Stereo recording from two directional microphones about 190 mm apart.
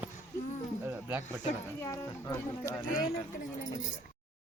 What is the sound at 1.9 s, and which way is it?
Speech, 15° left (ahead or behind).